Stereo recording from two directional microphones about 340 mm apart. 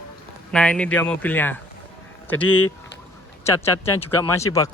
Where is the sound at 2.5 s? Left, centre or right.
Left.